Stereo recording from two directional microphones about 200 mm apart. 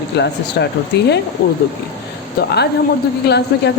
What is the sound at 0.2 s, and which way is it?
Speech, 55° left (ahead or behind).